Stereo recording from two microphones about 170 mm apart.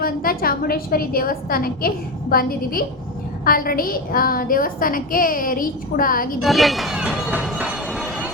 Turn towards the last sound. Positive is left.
turn(degrees=-5)  # may be behind; listen again after turning